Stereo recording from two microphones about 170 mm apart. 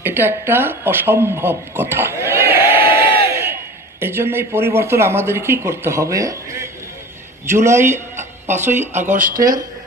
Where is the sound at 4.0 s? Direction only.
15° right (ahead or behind).